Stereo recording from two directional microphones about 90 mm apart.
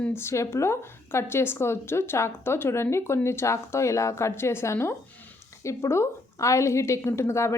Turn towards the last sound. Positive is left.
turn(degrees=30)  # may be behind; listen again after turning